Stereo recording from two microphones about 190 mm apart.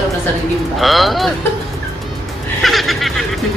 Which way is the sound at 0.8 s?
Centre (ahead or behind).